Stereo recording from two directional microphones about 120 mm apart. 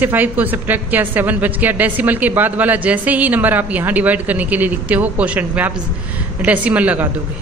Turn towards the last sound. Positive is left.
turn(degrees=-10)  # may be behind; listen again after turning